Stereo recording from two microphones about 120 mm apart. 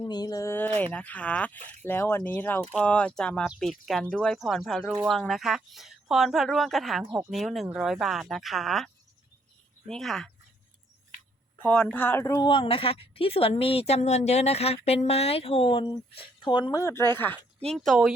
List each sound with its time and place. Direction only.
0.0 s speech: 35° left (ahead or behind)
0.9 s speech: 10° left (ahead or behind)
7.0 s speech: 20° right (ahead or behind)
7.3 s speech: centre (ahead or behind)
9.9 s speech: centre (ahead or behind)
11.6 s speech: 10° left (ahead or behind); by 12.5 s 25° left (ahead or behind)
12.5 s a woman's voice: 45° left (ahead or behind)
16.7 s speech: 25° left (ahead or behind)
17.7 s speech: centre (ahead or behind)